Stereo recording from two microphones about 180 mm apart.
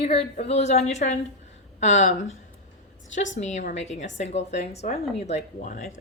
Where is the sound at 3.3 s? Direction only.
40° left (ahead or behind).